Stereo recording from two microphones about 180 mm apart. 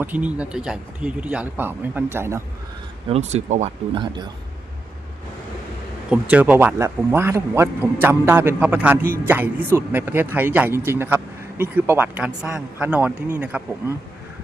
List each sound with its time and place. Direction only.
0.0 s a man's voice: 10° right (ahead or behind)
3.1 s speech: 35° right (ahead or behind)
3.9 s speech: 25° right (ahead or behind)
6.1 s a man's voice: 5° right (ahead or behind)